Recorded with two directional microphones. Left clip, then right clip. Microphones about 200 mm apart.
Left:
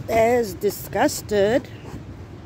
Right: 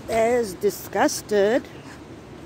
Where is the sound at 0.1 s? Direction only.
40° left (ahead or behind).